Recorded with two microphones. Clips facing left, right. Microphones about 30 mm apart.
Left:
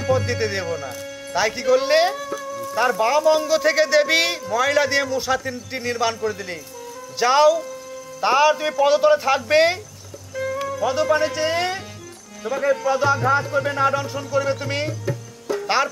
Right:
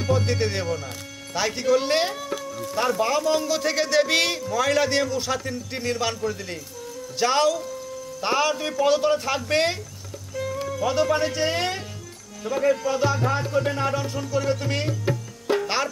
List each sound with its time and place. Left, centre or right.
0.0 s a man's voice: centre
15.0 s music: right
15.6 s music: centre